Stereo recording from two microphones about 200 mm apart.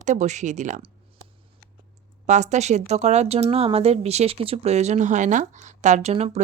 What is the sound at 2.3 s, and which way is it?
A woman's voice, 35° right (ahead or behind).